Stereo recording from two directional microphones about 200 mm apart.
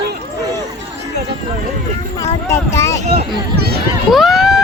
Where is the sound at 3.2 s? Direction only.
50° right (ahead or behind).